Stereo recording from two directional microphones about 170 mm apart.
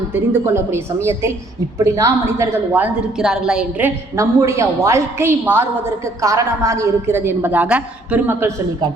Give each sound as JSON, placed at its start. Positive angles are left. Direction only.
{"t": 0.1, "sound": "a woman's voice", "side_deg": -15}